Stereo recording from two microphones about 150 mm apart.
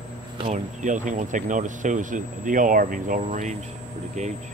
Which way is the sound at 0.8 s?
55° right (ahead or behind).